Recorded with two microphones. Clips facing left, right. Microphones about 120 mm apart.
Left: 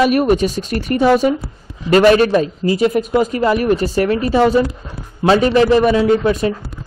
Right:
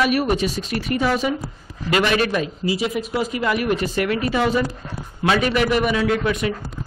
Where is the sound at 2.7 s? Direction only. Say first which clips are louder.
Left 10 dB; 50° left (ahead or behind); by 6.5 s 35° left (ahead or behind).